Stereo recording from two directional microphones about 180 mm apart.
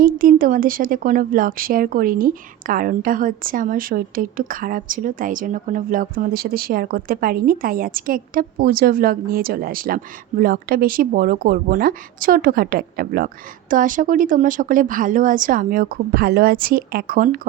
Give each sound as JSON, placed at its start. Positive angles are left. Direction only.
{"t": 0.0, "sound": "speech", "side_deg": -50}